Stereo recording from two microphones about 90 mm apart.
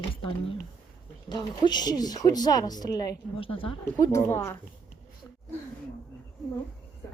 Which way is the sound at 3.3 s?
85° left.